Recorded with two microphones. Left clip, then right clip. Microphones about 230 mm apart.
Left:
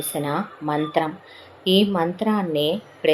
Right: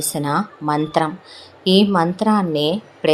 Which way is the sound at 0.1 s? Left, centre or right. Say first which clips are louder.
Right 4 dB; right.